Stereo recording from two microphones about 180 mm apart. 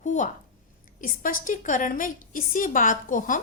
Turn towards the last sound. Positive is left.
turn(degrees=45)  # may be behind; listen again after turning